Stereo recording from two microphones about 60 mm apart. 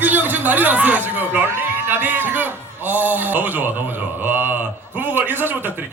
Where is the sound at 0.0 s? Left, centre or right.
Right.